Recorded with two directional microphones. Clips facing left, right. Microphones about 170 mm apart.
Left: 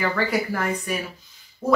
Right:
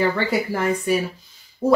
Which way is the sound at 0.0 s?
30° right (ahead or behind).